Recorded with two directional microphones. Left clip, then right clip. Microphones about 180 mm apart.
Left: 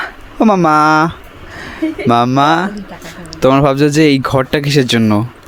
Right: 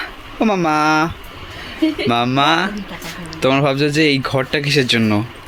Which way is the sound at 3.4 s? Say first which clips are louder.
Left 5 dB; 50° left (ahead or behind).